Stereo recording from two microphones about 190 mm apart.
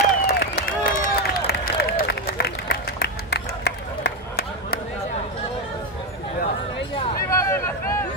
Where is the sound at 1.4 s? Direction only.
55° left (ahead or behind).